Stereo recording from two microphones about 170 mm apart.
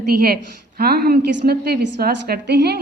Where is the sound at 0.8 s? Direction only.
65° right (ahead or behind).